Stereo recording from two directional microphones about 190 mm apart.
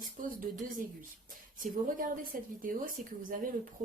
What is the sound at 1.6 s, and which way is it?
A woman's voice, 45° right (ahead or behind).